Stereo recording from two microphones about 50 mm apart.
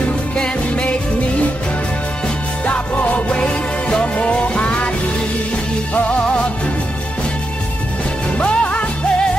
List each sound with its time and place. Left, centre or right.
0.4 s music: left
2.6 s music: left
6.0 s music: left
8.4 s music: left